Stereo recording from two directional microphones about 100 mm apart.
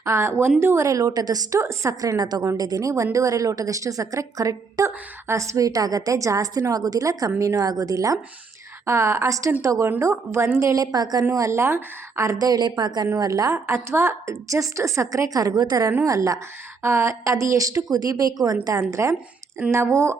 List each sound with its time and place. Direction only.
0.0 s a woman's voice: 25° right (ahead or behind)